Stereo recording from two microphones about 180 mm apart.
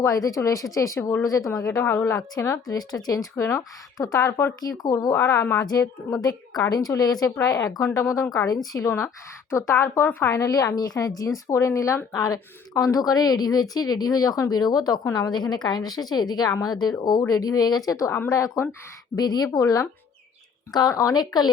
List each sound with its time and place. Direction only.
0.0 s a woman's voice: 20° left (ahead or behind)